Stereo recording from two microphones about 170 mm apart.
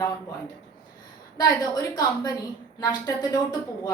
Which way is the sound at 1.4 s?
20° left (ahead or behind).